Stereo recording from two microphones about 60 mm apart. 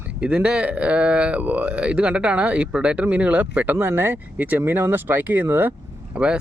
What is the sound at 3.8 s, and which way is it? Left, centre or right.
Speech, right.